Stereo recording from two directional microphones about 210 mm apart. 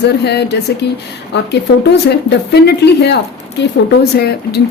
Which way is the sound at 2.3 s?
55° left (ahead or behind).